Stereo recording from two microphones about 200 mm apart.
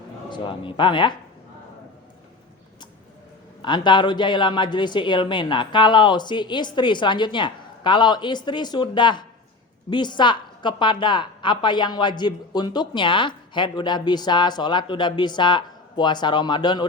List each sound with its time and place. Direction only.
0.3 s a woman's voice: 25° left (ahead or behind)
3.6 s a woman's voice: 25° left (ahead or behind)